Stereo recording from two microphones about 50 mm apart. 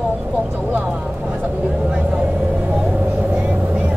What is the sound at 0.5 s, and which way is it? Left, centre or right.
Speech, right.